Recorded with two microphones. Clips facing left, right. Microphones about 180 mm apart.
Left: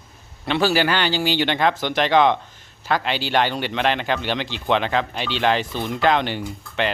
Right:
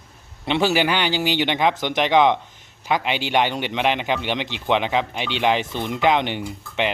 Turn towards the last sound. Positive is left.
turn(degrees=-15)  # may be behind; listen again after turning